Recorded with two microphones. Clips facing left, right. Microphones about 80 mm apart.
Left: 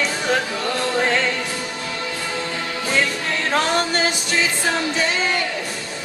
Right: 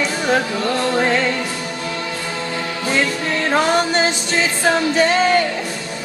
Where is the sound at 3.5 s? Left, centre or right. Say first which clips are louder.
Right 3 dB; centre.